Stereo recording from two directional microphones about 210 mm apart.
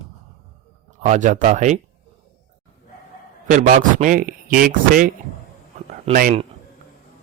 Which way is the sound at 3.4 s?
35° right (ahead or behind).